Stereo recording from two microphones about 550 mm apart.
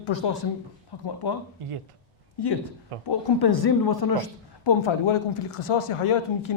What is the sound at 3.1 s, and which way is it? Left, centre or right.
A woman's voice, left.